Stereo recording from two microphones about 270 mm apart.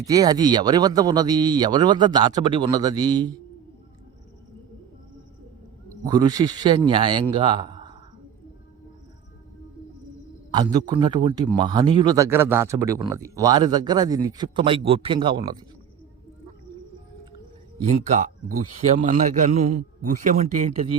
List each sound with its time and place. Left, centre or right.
0.0 s a man's voice: centre
6.1 s a man's voice: centre
10.5 s a man's voice: centre
17.8 s speech: right